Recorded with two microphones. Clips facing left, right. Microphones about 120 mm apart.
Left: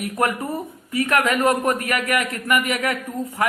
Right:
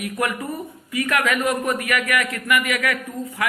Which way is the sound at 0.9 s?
30° left (ahead or behind).